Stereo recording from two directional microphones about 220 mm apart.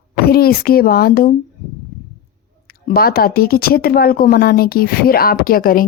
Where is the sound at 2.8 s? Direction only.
45° left (ahead or behind).